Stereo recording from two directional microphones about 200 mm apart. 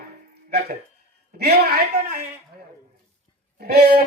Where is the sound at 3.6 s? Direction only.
50° right (ahead or behind).